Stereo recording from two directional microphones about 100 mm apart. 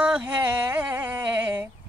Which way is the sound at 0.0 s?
15° right (ahead or behind).